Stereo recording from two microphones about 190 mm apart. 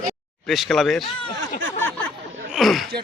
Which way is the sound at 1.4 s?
80° right.